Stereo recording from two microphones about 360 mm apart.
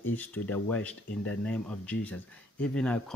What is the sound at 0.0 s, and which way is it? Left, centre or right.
Speech, centre.